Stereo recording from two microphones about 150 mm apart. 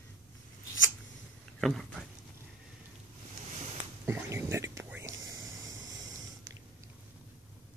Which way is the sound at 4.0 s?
15° right (ahead or behind).